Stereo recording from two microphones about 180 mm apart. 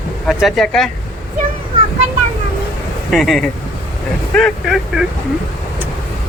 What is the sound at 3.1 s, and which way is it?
Speech, centre (ahead or behind).